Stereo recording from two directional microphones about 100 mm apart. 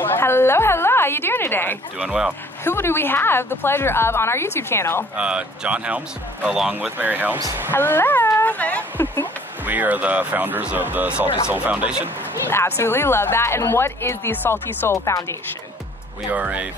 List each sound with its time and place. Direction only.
0.0 s a woman's voice: 20° left (ahead or behind)
2.0 s speech: 10° right (ahead or behind)
2.6 s speech: 25° left (ahead or behind)
5.1 s speech: 10° right (ahead or behind)
7.7 s a sound: 20° left (ahead or behind)
9.7 s speech: 15° right (ahead or behind)
12.4 s speech: 25° left (ahead or behind)
16.3 s speech: 15° right (ahead or behind)